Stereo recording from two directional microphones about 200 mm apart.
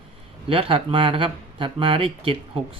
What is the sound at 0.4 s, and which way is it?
Speech, 25° right (ahead or behind).